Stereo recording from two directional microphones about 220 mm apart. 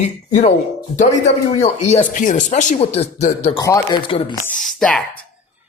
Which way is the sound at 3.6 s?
15° left (ahead or behind).